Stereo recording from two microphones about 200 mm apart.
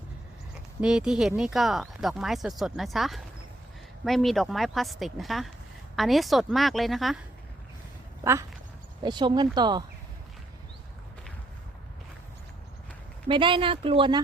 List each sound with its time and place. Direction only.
0.8 s a woman's voice: 5° right (ahead or behind)
8.2 s speech: 15° right (ahead or behind)
13.2 s speech: 25° right (ahead or behind)